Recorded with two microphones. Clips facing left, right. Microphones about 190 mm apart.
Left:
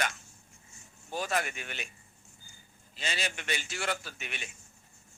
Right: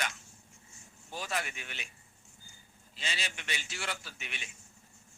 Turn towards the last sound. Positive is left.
turn(degrees=50)  # may be behind; listen again after turning